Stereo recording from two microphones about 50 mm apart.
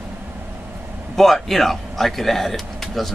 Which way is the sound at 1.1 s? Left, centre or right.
Centre.